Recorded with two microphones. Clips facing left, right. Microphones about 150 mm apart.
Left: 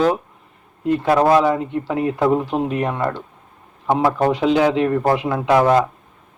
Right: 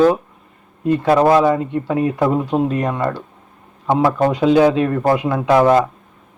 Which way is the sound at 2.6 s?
10° left (ahead or behind).